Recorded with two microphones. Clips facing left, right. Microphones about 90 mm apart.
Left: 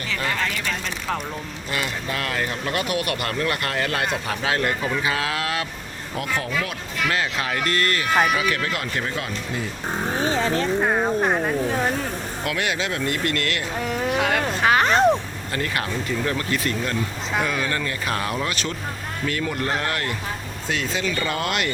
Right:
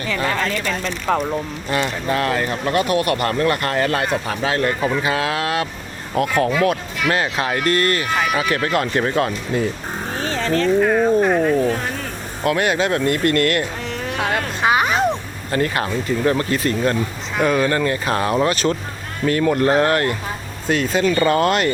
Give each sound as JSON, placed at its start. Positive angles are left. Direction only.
{"t": 1.0, "sound": "speech", "side_deg": -35}
{"t": 6.1, "sound": "speech", "side_deg": -50}
{"t": 7.1, "sound": "speech", "side_deg": -35}
{"t": 10.1, "sound": "speech", "side_deg": 20}
{"t": 12.5, "sound": "speech", "side_deg": -45}
{"t": 13.8, "sound": "a sound", "side_deg": 10}
{"t": 14.2, "sound": "speech", "side_deg": -25}
{"t": 14.6, "sound": "a sound", "side_deg": -15}
{"t": 15.5, "sound": "speech", "side_deg": -30}